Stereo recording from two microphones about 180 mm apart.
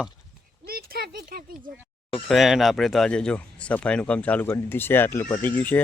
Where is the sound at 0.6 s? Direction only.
55° right (ahead or behind).